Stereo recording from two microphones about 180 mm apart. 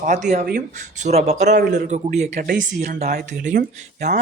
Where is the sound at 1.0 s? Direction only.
40° right (ahead or behind).